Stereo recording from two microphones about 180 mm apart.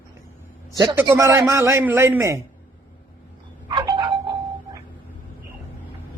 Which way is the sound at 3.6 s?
25° right (ahead or behind).